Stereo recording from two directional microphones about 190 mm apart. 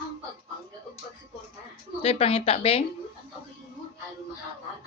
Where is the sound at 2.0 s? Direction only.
30° left (ahead or behind).